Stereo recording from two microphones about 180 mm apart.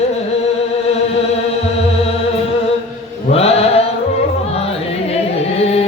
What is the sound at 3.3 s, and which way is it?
Mantra, 35° left (ahead or behind).